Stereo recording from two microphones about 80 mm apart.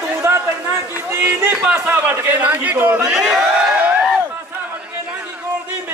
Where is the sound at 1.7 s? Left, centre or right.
Right.